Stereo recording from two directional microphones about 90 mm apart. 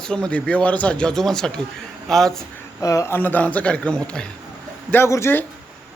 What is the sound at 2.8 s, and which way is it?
Speech, 40° left (ahead or behind).